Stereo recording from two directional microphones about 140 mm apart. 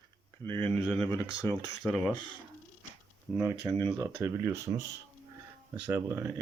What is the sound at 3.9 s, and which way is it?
Speech, 30° right (ahead or behind).